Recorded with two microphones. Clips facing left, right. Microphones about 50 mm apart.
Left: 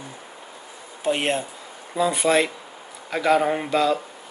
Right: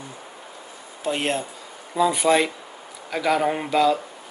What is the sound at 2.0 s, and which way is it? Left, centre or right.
Speech, centre.